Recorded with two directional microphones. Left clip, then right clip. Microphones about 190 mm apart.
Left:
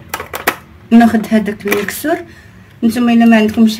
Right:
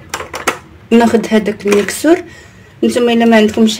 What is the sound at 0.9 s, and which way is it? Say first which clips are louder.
Speech: right 1 dB; 30° right (ahead or behind).